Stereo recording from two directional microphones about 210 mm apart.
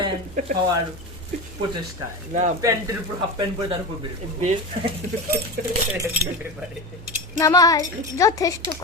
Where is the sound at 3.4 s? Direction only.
20° right (ahead or behind).